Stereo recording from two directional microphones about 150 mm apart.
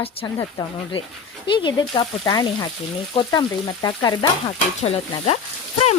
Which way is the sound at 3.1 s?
30° left (ahead or behind).